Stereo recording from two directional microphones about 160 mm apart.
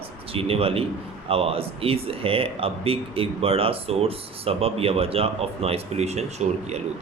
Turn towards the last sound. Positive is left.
turn(degrees=-45)  # may be behind; listen again after turning